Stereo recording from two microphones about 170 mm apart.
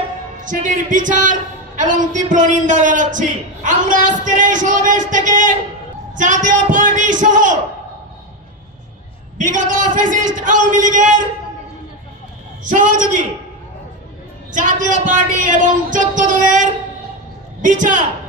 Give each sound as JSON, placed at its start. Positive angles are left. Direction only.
{"t": 0.4, "sound": "a man's voice", "side_deg": -50}
{"t": 9.4, "sound": "a man's voice", "side_deg": -50}
{"t": 12.6, "sound": "a man's voice", "side_deg": -50}
{"t": 14.5, "sound": "a man's voice", "side_deg": -50}